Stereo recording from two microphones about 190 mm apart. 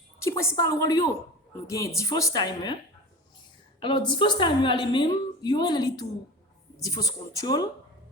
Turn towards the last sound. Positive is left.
turn(degrees=20)  # may be behind; listen again after turning